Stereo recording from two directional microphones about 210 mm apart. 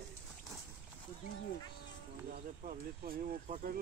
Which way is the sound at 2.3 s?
40° right (ahead or behind).